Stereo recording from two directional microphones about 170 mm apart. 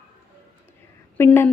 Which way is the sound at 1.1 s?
15° left (ahead or behind).